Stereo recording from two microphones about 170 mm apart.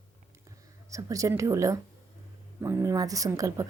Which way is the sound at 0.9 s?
20° right (ahead or behind).